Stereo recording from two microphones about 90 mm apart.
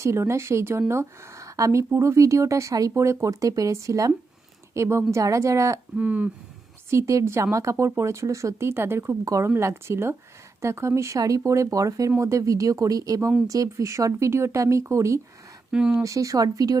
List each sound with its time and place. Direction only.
0.0 s speech: 30° right (ahead or behind)
6.0 s speech: 15° right (ahead or behind)
6.9 s speech: 35° right (ahead or behind)
15.7 s speech: 10° right (ahead or behind)
16.0 s speech: 35° right (ahead or behind)